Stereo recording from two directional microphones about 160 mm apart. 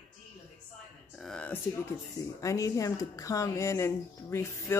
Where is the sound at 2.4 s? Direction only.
20° left (ahead or behind).